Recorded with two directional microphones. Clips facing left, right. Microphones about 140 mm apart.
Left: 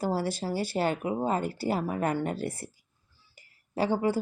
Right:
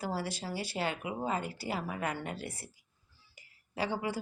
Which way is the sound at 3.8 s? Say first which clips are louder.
Left 8 dB; 55° left (ahead or behind).